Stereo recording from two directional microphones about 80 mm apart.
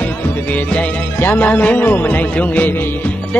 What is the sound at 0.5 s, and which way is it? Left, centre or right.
Music, left.